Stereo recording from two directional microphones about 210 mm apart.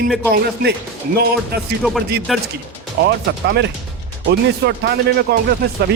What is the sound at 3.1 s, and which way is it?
Speech, 50° right (ahead or behind).